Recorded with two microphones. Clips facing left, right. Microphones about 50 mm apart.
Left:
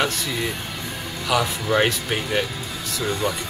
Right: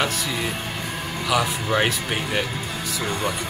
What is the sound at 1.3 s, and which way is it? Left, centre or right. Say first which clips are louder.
Speech: left 1 dB; centre.